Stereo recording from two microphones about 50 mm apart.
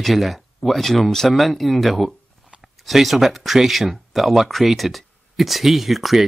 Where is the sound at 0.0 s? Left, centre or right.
Centre.